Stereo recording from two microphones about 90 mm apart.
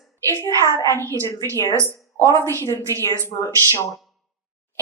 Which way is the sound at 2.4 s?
35° right (ahead or behind).